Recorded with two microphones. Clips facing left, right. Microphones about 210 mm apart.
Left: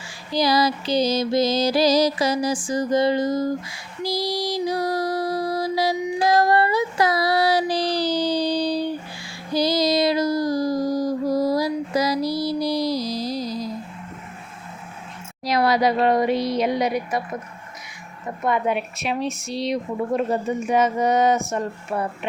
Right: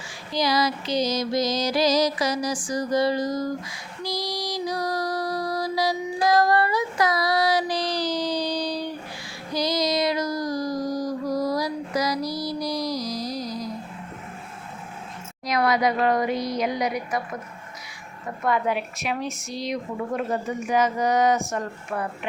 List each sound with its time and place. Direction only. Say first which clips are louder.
0.3 s music: left 3 dB; 35° left (ahead or behind)
9.5 s a sound: left 4 dB; 30° left (ahead or behind)
15.4 s speech: left 3 dB; 30° left (ahead or behind)
18.4 s speech: left 2 dB; 20° left (ahead or behind)